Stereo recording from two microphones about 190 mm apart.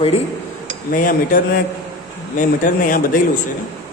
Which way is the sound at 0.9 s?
45° left (ahead or behind).